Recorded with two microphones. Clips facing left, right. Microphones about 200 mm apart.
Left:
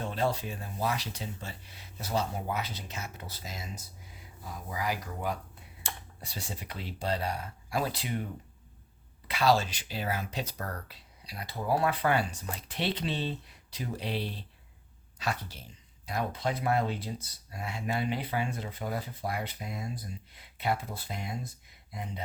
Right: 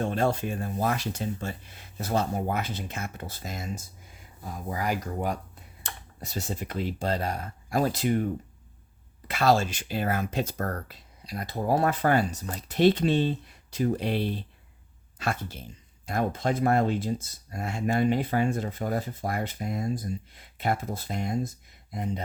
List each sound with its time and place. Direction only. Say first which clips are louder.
0.0 s speech: right 5 dB; 50° right (ahead or behind)
9.2 s speech: right 3 dB; 50° right (ahead or behind)